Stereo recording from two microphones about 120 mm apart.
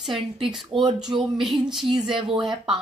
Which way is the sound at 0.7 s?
40° right (ahead or behind).